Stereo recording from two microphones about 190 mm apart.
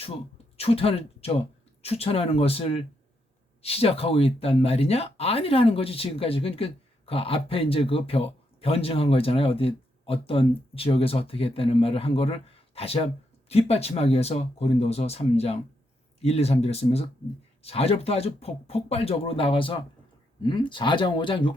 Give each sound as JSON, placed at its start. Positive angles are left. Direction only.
{"t": 0.0, "sound": "speech", "side_deg": 30}